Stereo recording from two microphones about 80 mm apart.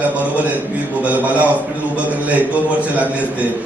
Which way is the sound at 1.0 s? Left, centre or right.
Centre.